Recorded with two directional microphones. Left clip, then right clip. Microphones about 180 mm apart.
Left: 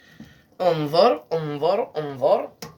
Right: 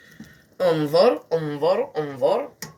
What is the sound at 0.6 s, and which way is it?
Speech, 35° left (ahead or behind).